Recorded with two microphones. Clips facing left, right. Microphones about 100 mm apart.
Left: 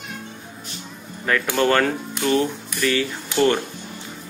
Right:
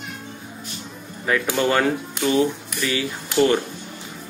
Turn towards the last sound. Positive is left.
turn(degrees=-5)  # may be behind; listen again after turning